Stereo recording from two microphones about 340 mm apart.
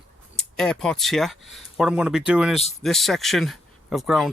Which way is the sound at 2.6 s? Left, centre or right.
Centre.